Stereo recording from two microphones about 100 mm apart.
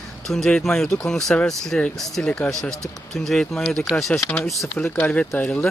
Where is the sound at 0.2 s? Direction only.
5° left (ahead or behind).